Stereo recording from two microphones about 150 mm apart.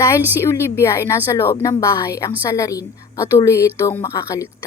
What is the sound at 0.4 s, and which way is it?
A woman's voice, 15° left (ahead or behind).